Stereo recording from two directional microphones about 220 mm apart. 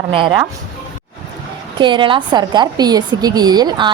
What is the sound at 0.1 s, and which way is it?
Speech, 25° right (ahead or behind).